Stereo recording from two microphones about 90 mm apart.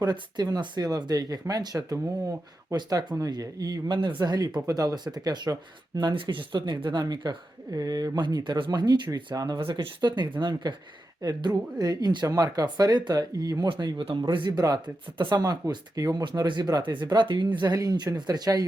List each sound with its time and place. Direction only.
0.0 s speech: 50° right (ahead or behind)
2.7 s speech: 50° right (ahead or behind)
9.6 s speech: 65° right (ahead or behind)
14.3 s speech: 60° right (ahead or behind)
15.2 s speech: 50° right (ahead or behind)